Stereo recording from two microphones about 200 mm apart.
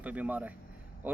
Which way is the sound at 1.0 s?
10° right (ahead or behind).